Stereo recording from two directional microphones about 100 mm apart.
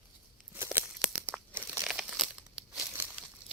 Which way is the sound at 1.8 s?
10° right (ahead or behind).